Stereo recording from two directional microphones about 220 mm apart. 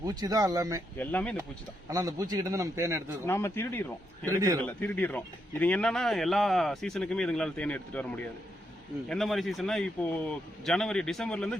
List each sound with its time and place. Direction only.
0.0 s a man's voice: 15° right (ahead or behind)
0.9 s speech: 5° left (ahead or behind)
1.9 s a man's voice: 15° right (ahead or behind)
3.2 s speech: 10° left (ahead or behind)
4.3 s a man's voice: 15° right (ahead or behind)
4.6 s speech: 5° left (ahead or behind)